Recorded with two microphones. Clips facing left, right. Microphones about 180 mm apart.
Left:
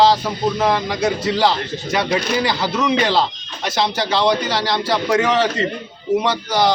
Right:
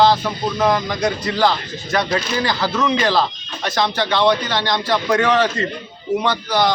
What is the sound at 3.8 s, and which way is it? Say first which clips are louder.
Speech: right 1 dB; 30° left (ahead or behind).